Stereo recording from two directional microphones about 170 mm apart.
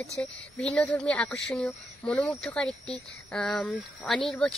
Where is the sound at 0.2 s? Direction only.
5° left (ahead or behind).